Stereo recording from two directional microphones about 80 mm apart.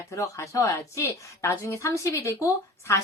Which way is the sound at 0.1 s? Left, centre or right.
Left.